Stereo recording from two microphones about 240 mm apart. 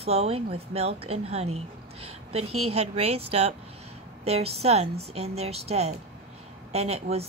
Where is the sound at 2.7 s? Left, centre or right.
Right.